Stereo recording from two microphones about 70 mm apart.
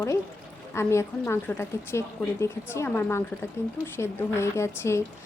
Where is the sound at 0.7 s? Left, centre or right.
Left.